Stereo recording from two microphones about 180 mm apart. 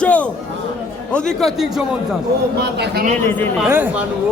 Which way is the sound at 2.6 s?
65° right (ahead or behind).